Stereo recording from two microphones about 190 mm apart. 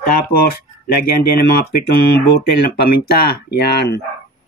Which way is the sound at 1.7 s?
55° left (ahead or behind).